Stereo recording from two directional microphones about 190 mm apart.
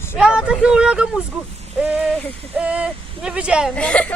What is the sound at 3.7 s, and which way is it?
Speech, 5° left (ahead or behind).